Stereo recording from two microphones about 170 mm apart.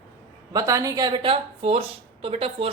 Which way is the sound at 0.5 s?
20° right (ahead or behind).